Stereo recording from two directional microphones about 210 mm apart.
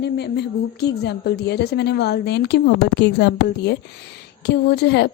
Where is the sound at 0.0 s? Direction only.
50° left (ahead or behind).